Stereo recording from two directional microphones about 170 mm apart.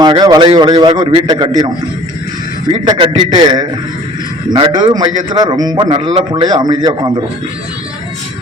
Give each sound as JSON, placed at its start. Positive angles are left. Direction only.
{"t": 0.0, "sound": "a man's voice", "side_deg": -25}
{"t": 2.8, "sound": "a man's voice", "side_deg": -25}